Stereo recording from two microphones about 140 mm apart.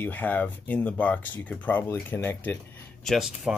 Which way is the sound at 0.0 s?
15° left (ahead or behind).